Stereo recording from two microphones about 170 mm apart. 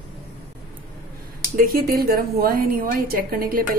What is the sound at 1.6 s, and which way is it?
A woman's voice, 60° right (ahead or behind).